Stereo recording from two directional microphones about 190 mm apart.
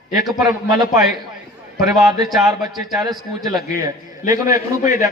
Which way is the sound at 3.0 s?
20° right (ahead or behind).